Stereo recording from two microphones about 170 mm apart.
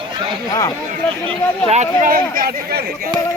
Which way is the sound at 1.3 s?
35° right (ahead or behind).